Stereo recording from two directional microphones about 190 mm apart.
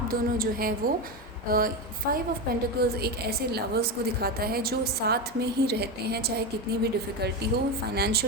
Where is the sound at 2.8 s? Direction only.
55° right (ahead or behind).